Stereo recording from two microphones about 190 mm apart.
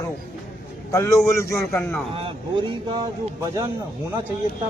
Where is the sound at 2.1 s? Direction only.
25° right (ahead or behind).